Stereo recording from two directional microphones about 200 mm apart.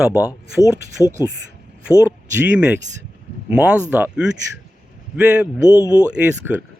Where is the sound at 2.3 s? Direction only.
10° right (ahead or behind).